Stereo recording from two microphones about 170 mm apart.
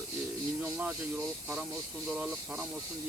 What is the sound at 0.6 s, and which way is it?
Speech, 5° right (ahead or behind).